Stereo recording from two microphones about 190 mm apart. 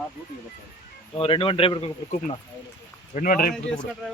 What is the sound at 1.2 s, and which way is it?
Speech, 30° left (ahead or behind).